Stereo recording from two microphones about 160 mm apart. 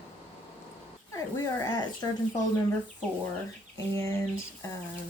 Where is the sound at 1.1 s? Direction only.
20° left (ahead or behind).